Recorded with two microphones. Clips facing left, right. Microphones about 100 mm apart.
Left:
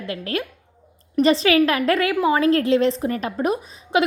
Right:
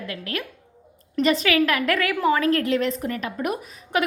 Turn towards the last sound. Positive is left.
turn(degrees=20)  # may be behind; listen again after turning